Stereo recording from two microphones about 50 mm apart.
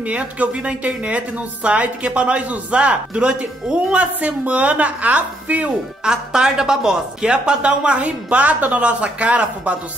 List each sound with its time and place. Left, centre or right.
0.0 s speech: right
6.0 s speech: centre